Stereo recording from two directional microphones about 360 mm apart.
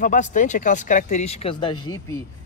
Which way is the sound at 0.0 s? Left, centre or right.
Left.